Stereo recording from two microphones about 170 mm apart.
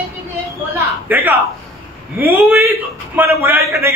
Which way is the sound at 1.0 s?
10° right (ahead or behind).